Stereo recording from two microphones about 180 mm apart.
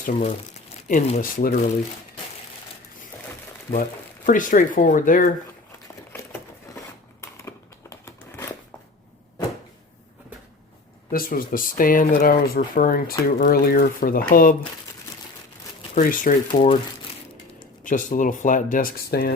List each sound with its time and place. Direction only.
0.0 s speech: 45° left (ahead or behind)
4.3 s speech: 45° left (ahead or behind)
7.2 s a sound: 15° left (ahead or behind)
11.1 s speech: 50° left (ahead or behind)
16.0 s speech: 45° left (ahead or behind)
17.8 s speech: 45° left (ahead or behind)